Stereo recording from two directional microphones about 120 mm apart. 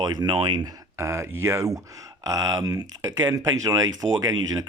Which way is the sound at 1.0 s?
25° right (ahead or behind).